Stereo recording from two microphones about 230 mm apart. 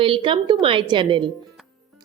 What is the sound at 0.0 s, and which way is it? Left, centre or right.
A woman's voice, right.